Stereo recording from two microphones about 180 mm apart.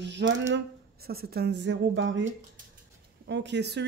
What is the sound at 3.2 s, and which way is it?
Speech, 75° right (ahead or behind).